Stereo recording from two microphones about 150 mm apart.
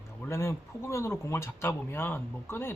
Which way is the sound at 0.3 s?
20° left (ahead or behind).